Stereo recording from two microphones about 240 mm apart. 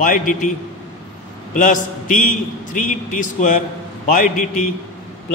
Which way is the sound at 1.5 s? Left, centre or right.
Left.